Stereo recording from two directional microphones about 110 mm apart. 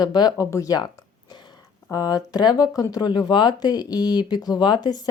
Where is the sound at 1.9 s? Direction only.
35° left (ahead or behind).